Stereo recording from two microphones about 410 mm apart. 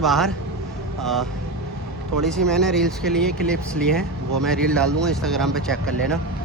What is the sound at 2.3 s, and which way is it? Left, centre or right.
Speech, centre.